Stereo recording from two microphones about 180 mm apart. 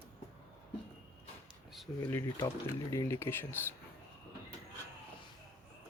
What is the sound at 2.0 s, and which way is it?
Speech, 20° left (ahead or behind).